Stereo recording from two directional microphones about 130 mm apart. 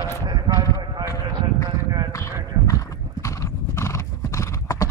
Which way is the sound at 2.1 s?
25° left (ahead or behind).